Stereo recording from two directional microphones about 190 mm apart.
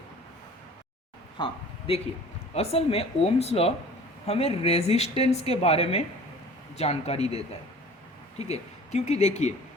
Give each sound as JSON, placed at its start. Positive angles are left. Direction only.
{"t": 2.6, "sound": "a woman's voice", "side_deg": 30}